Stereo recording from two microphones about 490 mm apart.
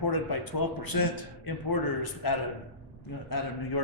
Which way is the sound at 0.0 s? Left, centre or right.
Left.